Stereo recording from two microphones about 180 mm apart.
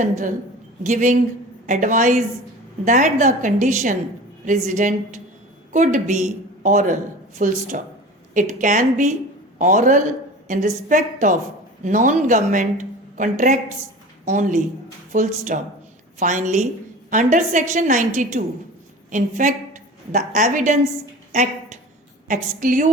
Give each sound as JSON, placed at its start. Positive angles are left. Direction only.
{"t": 0.0, "sound": "a woman's voice", "side_deg": -45}
{"t": 22.3, "sound": "a woman's voice", "side_deg": -45}